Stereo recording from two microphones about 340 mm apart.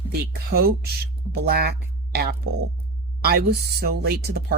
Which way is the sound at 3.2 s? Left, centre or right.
Right.